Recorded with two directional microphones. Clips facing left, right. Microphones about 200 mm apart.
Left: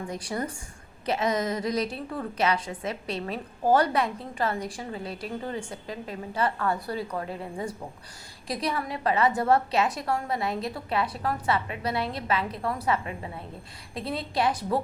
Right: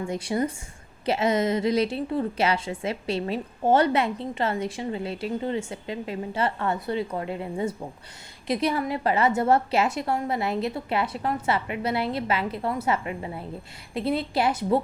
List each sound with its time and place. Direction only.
0.1 s a woman's voice: 25° right (ahead or behind)